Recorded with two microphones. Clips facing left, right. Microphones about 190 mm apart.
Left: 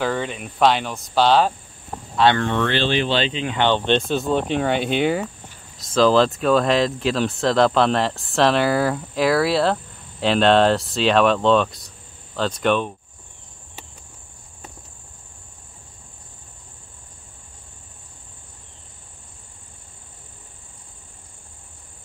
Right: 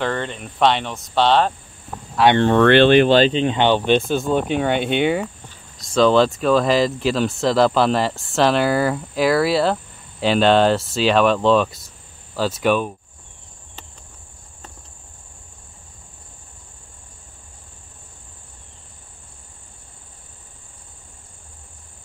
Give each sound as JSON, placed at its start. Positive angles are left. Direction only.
{"t": 0.0, "sound": "speech", "side_deg": 5}
{"t": 2.2, "sound": "speech", "side_deg": -10}
{"t": 2.6, "sound": "speech", "side_deg": -60}
{"t": 3.4, "sound": "speech", "side_deg": -15}